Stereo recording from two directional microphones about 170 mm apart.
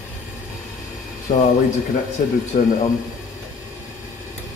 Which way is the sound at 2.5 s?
45° left (ahead or behind).